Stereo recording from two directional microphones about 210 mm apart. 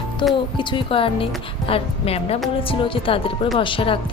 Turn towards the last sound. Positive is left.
turn(degrees=25)  # may be behind; listen again after turning